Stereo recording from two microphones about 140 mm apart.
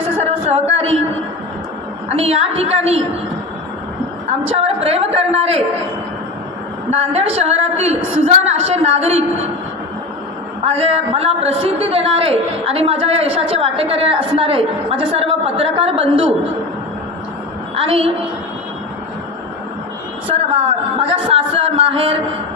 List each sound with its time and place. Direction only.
0.2 s a sound: 50° right (ahead or behind)
2.1 s a man's voice: 45° right (ahead or behind)
4.5 s a man's voice: 45° right (ahead or behind)
6.9 s a man's voice: 50° right (ahead or behind)
10.7 s a man's voice: 45° right (ahead or behind)
17.7 s speech: 40° right (ahead or behind)
21.1 s speech: 40° right (ahead or behind)